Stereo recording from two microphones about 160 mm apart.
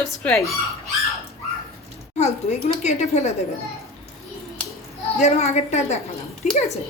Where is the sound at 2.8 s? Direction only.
45° left (ahead or behind).